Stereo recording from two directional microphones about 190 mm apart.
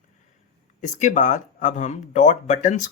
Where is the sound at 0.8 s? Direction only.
40° left (ahead or behind).